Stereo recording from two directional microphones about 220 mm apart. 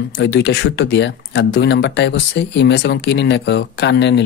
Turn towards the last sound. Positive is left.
turn(degrees=50)  # may be behind; listen again after turning